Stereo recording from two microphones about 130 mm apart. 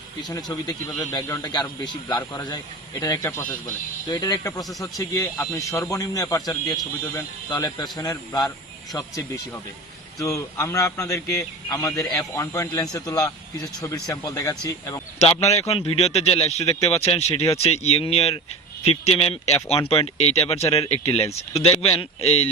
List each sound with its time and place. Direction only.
0.2 s a man's voice: 30° left (ahead or behind); by 3.8 s 15° left (ahead or behind)
4.1 s a man's voice: 30° left (ahead or behind)
15.6 s speech: 45° left (ahead or behind)